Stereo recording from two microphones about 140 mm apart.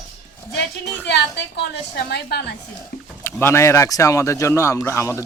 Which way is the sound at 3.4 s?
20° left (ahead or behind).